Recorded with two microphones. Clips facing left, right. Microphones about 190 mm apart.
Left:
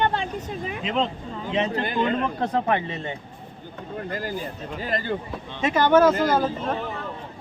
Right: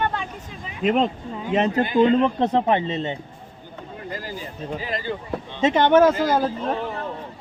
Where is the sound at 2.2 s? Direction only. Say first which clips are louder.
Right 5 dB; 25° right (ahead or behind).